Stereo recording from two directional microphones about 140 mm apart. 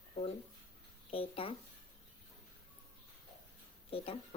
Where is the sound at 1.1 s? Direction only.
40° left (ahead or behind).